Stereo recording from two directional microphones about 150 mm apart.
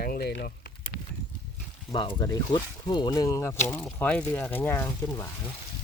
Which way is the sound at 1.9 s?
35° left (ahead or behind).